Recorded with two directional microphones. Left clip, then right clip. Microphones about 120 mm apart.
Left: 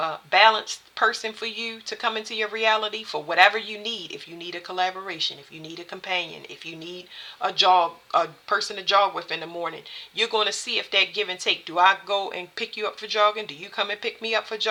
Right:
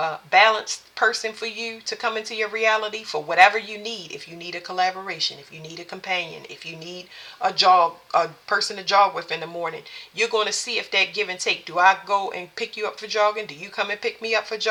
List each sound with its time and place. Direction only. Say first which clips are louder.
0.0 s speech: right 1 dB; 35° left (ahead or behind)